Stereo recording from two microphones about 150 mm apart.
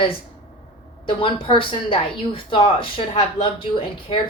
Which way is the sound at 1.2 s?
35° left (ahead or behind).